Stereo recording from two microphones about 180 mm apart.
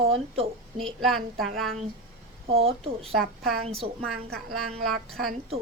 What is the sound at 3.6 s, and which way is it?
Speech, 30° right (ahead or behind).